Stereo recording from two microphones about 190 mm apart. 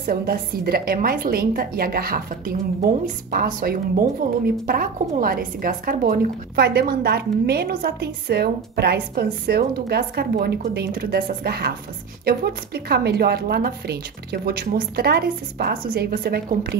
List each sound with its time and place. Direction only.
0.0 s a woman's voice: 50° right (ahead or behind)